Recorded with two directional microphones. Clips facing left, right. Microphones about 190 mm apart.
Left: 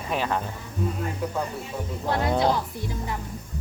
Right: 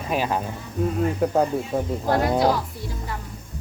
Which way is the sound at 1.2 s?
55° right (ahead or behind).